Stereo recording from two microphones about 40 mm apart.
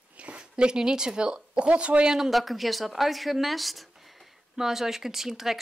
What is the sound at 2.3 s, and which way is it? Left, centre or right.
Speech, centre.